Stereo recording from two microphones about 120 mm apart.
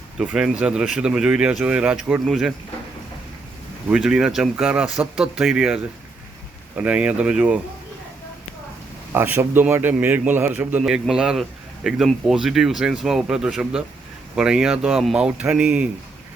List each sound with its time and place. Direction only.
0.2 s a man's voice: 5° right (ahead or behind)
2.2 s speech: centre (ahead or behind)
3.8 s a man's voice: 5° right (ahead or behind)
9.1 s a man's voice: 15° right (ahead or behind)